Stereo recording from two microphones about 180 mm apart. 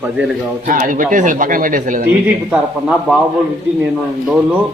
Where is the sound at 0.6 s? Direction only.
50° right (ahead or behind).